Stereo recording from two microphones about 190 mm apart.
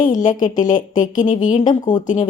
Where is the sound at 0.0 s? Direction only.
45° left (ahead or behind).